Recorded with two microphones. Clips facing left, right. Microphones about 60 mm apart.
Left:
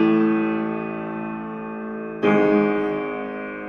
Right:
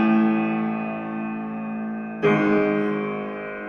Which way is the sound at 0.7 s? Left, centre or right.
Right.